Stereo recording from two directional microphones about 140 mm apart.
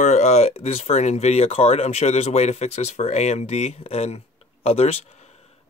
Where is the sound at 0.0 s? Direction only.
55° left (ahead or behind).